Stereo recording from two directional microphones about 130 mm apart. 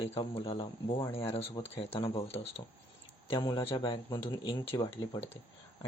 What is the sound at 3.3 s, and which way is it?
A man's voice, 35° left (ahead or behind).